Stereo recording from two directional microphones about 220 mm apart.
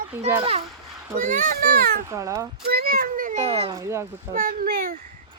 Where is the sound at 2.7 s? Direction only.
45° right (ahead or behind).